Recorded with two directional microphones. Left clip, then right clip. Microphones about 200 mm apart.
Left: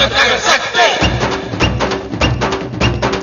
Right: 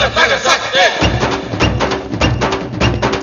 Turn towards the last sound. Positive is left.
turn(degrees=0)  # may be behind; listen again after turning